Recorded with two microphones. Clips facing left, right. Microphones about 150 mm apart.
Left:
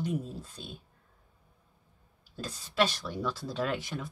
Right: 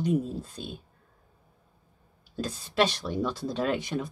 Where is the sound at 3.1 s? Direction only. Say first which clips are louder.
Right 5 dB; 20° right (ahead or behind).